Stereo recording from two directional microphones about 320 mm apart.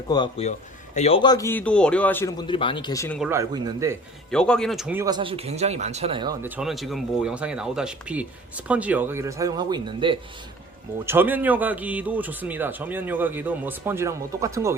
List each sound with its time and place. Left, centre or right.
0.1 s a man's voice: centre
3.2 s speech: centre
4.3 s speech: centre
6.6 s speech: centre